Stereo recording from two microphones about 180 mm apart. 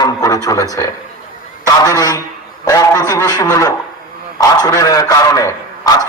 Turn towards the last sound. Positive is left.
turn(degrees=20)  # may be behind; listen again after turning